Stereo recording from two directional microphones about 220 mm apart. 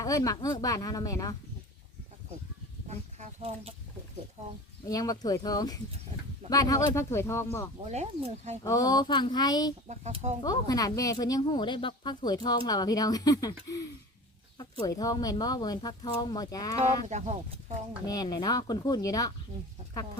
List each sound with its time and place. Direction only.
0.0 s speech: 15° left (ahead or behind)
3.2 s a sound: 25° right (ahead or behind)
4.9 s speech: 15° left (ahead or behind)
7.9 s speech: 30° right (ahead or behind)
8.6 s speech: 15° left (ahead or behind)
9.9 s speech: 30° right (ahead or behind)
10.4 s speech: 15° left (ahead or behind)
16.8 s speech: 30° right (ahead or behind)
18.0 s speech: 15° left (ahead or behind)